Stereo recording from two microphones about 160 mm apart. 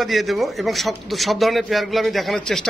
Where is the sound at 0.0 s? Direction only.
Centre (ahead or behind).